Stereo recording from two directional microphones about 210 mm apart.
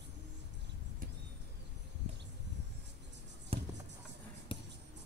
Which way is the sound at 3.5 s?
25° right (ahead or behind).